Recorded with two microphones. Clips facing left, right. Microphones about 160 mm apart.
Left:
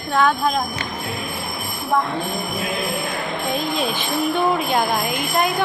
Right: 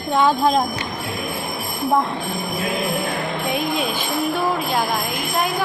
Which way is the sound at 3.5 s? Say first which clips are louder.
Right 1 dB; 10° right (ahead or behind).